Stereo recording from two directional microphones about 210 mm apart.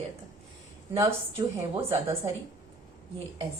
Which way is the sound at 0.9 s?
15° right (ahead or behind).